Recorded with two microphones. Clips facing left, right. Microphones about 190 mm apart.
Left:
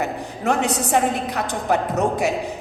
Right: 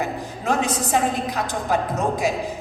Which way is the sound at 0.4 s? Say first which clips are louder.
Left 2 dB; 70° left (ahead or behind).